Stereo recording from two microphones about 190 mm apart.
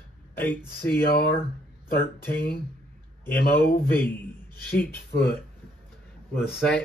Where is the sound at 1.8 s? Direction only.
55° left (ahead or behind).